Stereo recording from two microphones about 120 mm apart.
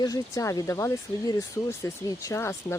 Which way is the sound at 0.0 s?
30° left (ahead or behind).